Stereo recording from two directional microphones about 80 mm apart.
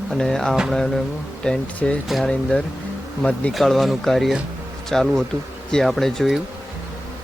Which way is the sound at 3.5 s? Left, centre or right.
Centre.